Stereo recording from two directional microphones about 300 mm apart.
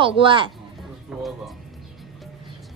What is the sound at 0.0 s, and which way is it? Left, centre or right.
Speech, centre.